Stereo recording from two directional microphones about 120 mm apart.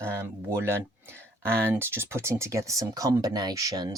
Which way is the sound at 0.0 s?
20° right (ahead or behind).